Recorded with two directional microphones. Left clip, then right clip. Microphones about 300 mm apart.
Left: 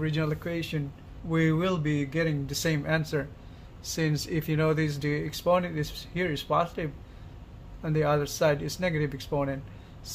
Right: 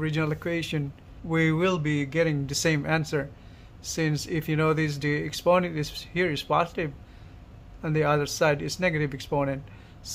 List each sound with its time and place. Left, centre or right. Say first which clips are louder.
0.0 s speech: right 2 dB; centre